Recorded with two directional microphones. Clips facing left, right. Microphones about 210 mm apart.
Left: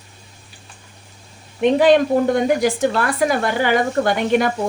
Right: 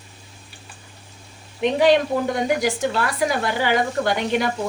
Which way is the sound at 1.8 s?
50° left (ahead or behind).